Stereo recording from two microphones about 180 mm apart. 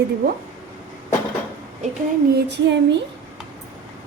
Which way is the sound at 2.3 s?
70° right (ahead or behind).